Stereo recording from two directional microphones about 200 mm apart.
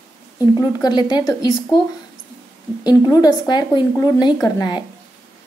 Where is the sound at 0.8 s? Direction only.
20° left (ahead or behind).